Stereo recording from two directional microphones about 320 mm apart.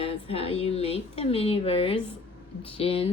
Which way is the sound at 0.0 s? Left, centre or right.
Centre.